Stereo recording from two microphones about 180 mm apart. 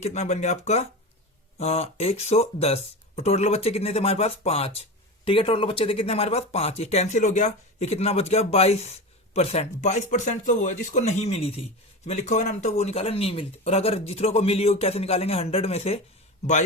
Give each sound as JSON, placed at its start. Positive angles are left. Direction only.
{"t": 0.0, "sound": "speech", "side_deg": 40}